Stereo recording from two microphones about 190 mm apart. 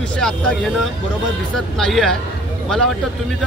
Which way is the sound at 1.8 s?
Centre (ahead or behind).